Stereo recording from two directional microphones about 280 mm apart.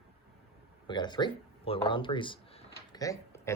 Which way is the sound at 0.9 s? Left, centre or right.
Centre.